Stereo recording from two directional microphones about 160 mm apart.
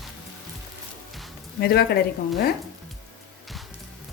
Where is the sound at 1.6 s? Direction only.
85° left.